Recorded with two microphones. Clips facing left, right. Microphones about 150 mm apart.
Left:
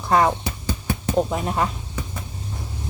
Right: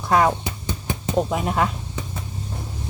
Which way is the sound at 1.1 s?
5° right (ahead or behind).